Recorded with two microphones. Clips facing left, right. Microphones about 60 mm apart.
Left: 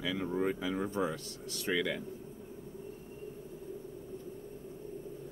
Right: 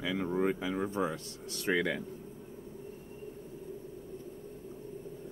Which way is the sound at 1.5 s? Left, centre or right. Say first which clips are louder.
Right 2 dB; right.